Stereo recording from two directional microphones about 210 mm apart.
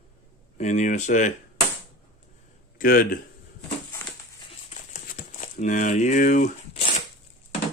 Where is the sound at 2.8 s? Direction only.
45° left (ahead or behind).